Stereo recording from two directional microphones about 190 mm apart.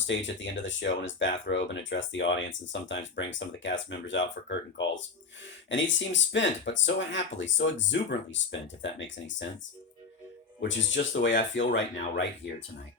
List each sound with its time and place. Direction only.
0.1 s speech: 75° left (ahead or behind)
10.6 s speech: 65° left (ahead or behind)